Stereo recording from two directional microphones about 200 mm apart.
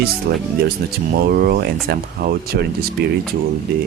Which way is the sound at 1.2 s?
50° right (ahead or behind).